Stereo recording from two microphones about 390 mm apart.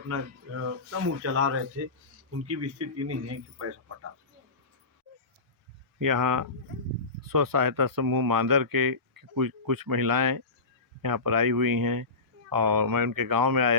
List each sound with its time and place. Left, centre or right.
0.1 s speech: right
6.0 s speech: right